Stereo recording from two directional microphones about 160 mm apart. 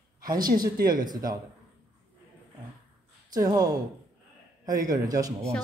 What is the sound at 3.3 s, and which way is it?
Speech, 25° right (ahead or behind).